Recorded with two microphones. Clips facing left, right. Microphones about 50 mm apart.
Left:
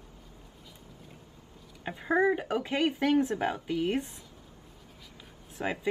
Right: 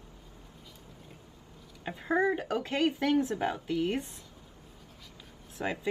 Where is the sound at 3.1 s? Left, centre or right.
Centre.